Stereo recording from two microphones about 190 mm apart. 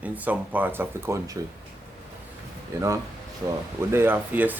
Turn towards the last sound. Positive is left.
turn(degrees=-10)  # may be behind; listen again after turning